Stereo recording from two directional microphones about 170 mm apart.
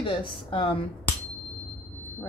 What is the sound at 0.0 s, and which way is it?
Speech, 30° left (ahead or behind).